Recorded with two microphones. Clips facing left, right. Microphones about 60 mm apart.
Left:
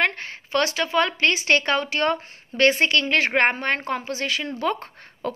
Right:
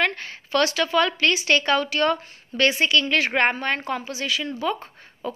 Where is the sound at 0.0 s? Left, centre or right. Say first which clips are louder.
Left 1 dB; left.